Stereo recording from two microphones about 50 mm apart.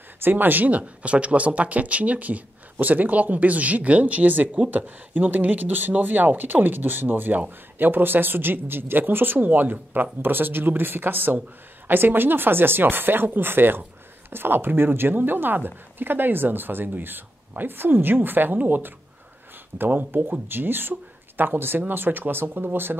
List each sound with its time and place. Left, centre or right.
0.2 s a woman's voice: right